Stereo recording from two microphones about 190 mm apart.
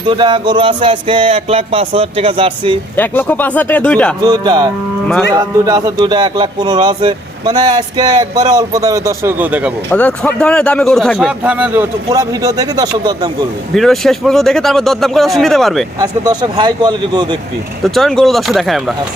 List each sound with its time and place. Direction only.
0.1 s speech: 25° right (ahead or behind)
2.9 s speech: 10° left (ahead or behind)
4.2 s speech: 20° right (ahead or behind)
9.9 s a man's voice: 5° left (ahead or behind); by 13.5 s 20° right (ahead or behind)
13.7 s a man's voice: centre (ahead or behind)
16.0 s speech: 20° right (ahead or behind)
17.8 s a man's voice: centre (ahead or behind)